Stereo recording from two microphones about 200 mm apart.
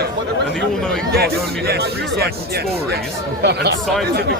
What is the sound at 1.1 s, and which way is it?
Speech, 50° right (ahead or behind).